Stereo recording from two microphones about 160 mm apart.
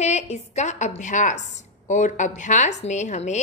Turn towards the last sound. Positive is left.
turn(degrees=45)  # may be behind; listen again after turning